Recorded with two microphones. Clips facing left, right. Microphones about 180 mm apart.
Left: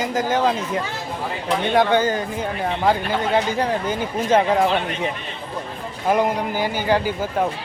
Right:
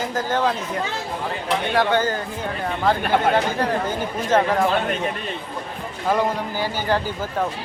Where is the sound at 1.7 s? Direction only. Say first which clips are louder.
Left 3 dB; 15° left (ahead or behind).